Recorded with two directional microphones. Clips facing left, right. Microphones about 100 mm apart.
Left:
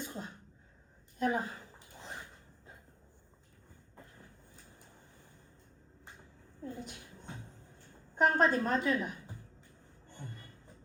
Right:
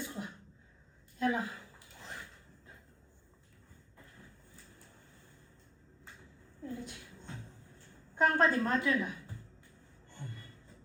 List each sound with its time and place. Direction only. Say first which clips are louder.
0.0 s sneeze: right 1 dB; 15° left (ahead or behind)
1.2 s a sound: even; 15° left (ahead or behind)
4.2 s vehicle: even; 15° left (ahead or behind)
6.1 s a sound: even; 15° left (ahead or behind)
8.2 s a woman's voice: even; 15° left (ahead or behind)
10.1 s music: even; 15° left (ahead or behind)